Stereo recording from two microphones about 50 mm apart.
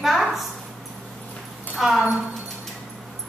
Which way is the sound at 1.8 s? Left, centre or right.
Centre.